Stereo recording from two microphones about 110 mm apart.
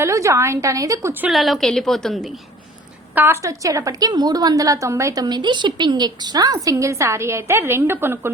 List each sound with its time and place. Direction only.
0.0 s a woman's voice: 25° right (ahead or behind)
1.3 s a woman's voice: centre (ahead or behind)
3.4 s a woman's voice: 30° right (ahead or behind)